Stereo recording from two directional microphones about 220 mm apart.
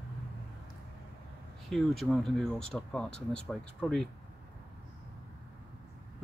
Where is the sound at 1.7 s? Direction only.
Centre (ahead or behind).